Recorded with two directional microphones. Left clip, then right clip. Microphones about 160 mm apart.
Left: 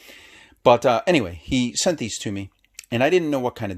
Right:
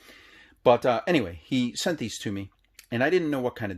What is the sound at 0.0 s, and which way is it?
Speech, 35° left (ahead or behind).